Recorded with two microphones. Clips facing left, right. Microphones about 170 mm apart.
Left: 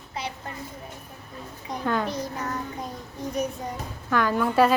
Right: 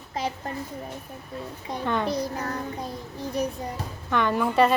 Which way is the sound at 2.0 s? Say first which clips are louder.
Right 3 dB; 35° right (ahead or behind).